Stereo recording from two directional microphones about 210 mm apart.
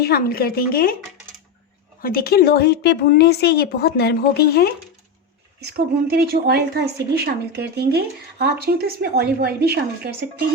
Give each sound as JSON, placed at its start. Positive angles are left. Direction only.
{"t": 0.0, "sound": "speech", "side_deg": 45}
{"t": 2.0, "sound": "speech", "side_deg": 45}
{"t": 5.5, "sound": "speech", "side_deg": -45}